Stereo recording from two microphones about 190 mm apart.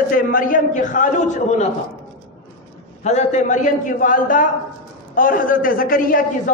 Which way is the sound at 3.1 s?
40° left (ahead or behind).